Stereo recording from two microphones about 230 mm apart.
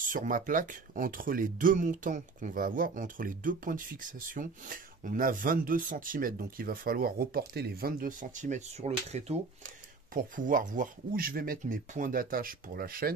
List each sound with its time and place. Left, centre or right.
0.1 s speech: right